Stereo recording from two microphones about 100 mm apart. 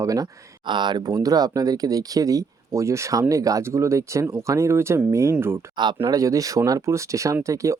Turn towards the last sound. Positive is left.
turn(degrees=-30)  # may be behind; listen again after turning